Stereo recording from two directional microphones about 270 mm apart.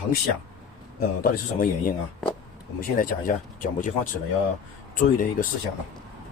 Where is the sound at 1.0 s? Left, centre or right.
Left.